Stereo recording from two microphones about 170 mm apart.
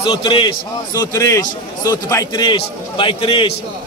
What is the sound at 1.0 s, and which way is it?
A man's voice, 15° left (ahead or behind).